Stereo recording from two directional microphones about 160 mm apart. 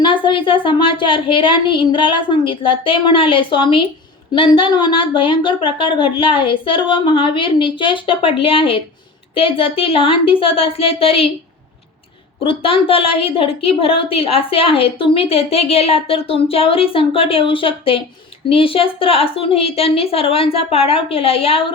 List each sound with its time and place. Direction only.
0.0 s a woman's voice: 30° left (ahead or behind)
12.4 s a woman's voice: 35° left (ahead or behind)